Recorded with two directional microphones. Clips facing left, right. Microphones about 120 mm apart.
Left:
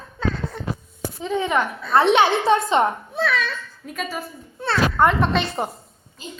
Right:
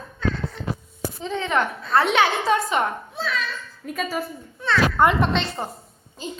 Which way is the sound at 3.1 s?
65° left (ahead or behind).